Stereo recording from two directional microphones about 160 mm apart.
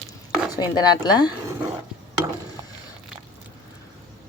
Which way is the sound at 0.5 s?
25° left (ahead or behind).